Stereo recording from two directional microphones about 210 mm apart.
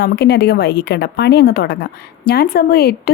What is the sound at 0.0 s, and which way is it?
A woman's voice, 50° left (ahead or behind).